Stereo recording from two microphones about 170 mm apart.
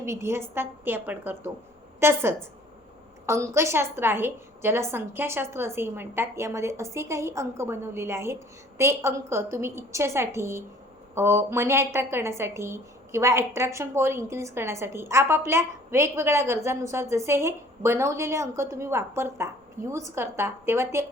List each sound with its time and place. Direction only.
0.0 s a woman's voice: 15° right (ahead or behind)